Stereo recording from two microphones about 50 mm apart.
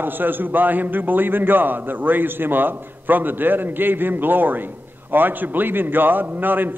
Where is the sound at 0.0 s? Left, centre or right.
Right.